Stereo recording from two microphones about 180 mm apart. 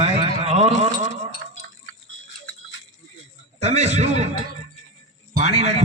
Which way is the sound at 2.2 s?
90° left.